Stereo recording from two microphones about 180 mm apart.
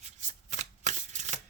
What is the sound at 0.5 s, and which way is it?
Shuffling cards, 40° right (ahead or behind).